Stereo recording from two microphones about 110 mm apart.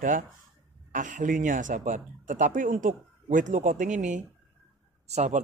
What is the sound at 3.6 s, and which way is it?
Speech, 90° right.